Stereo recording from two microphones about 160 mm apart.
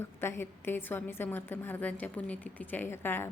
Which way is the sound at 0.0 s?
15° left (ahead or behind).